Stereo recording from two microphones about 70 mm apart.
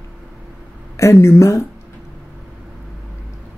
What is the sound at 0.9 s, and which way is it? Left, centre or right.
Speech, left.